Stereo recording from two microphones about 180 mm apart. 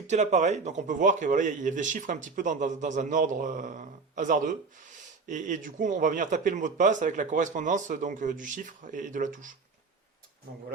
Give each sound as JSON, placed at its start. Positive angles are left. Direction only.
{"t": 0.1, "sound": "speech", "side_deg": -40}